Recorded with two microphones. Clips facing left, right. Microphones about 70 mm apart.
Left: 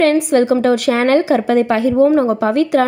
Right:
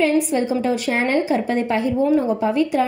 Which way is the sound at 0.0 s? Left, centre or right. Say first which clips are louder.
Left 6 dB; left.